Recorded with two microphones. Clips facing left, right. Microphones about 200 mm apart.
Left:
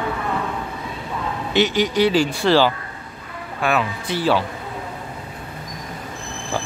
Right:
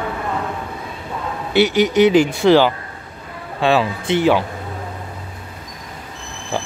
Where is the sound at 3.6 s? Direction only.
30° right (ahead or behind).